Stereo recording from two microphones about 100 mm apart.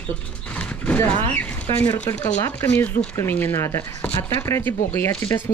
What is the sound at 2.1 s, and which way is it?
Speech, 30° left (ahead or behind).